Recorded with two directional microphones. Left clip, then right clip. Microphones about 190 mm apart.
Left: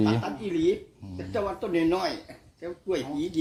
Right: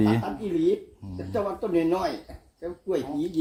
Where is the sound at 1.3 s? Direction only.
40° right (ahead or behind).